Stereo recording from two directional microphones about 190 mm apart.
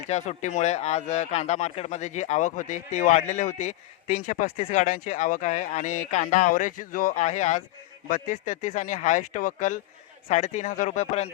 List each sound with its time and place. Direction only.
0.1 s speech: 35° left (ahead or behind)